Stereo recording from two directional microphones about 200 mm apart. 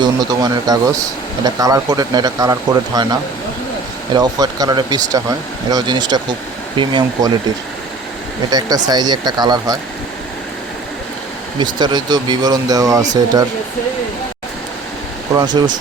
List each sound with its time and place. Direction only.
0.0 s speech: 20° right (ahead or behind)
8.4 s speech: 20° right (ahead or behind)
11.6 s speech: 20° right (ahead or behind)
15.4 s speech: 20° right (ahead or behind)